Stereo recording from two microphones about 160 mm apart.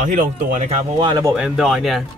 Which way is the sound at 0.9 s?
30° right (ahead or behind).